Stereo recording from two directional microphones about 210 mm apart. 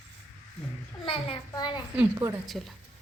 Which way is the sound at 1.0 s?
25° left (ahead or behind).